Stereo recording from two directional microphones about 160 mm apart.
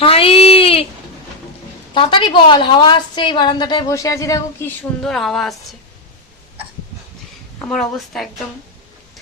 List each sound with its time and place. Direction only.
0.0 s a sound: 35° left (ahead or behind)
1.9 s a woman's voice: 30° left (ahead or behind); by 5.5 s centre (ahead or behind)
7.6 s a woman's voice: 5° left (ahead or behind)